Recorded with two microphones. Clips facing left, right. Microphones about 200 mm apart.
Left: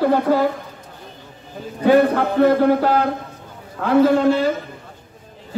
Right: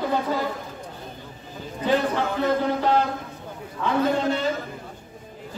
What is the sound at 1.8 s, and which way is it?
Speech, 60° left (ahead or behind).